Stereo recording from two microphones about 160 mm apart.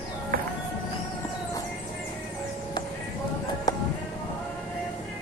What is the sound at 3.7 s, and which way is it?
Music, 25° left (ahead or behind).